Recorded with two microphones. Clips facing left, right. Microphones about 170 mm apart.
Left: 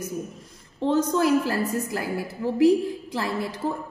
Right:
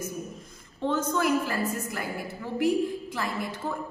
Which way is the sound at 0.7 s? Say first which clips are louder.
Left 5 dB; 35° left (ahead or behind).